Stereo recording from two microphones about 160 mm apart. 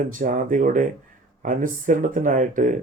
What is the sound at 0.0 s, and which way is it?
Speech, 55° right (ahead or behind).